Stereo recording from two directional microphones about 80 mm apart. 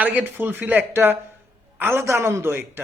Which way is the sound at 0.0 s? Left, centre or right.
Centre.